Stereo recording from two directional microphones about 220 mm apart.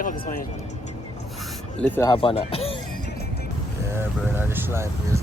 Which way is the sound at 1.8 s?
10° left (ahead or behind).